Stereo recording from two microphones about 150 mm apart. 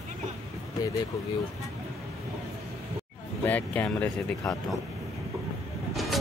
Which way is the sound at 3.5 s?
10° left (ahead or behind).